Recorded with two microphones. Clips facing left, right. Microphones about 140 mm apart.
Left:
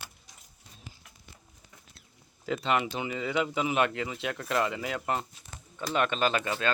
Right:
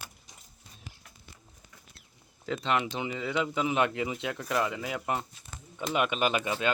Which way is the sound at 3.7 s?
20° right (ahead or behind).